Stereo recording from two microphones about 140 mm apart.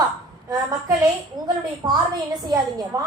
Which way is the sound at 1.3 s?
30° right (ahead or behind).